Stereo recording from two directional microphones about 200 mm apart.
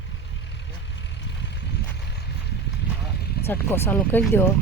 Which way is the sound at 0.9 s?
60° left (ahead or behind).